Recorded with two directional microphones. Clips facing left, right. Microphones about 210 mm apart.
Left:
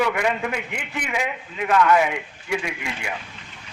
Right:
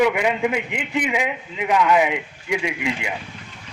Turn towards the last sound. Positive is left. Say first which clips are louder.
# right 5 dB
turn(degrees=-15)  # may be behind; listen again after turning